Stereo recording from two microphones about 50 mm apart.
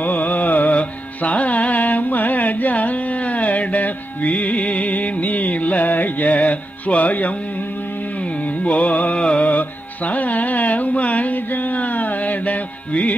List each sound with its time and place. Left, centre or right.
0.0 s carnatic music: left
8.2 s music: left